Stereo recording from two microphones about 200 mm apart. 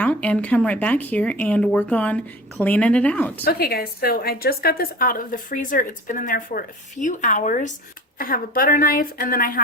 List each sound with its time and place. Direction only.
0.0 s speech: 5° left (ahead or behind)
3.4 s a woman's voice: 50° left (ahead or behind)